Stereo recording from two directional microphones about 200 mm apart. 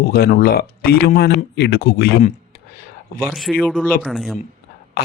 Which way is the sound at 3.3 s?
Centre (ahead or behind).